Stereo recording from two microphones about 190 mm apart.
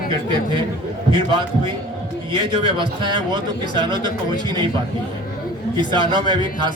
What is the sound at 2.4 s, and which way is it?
A man's voice, 25° right (ahead or behind).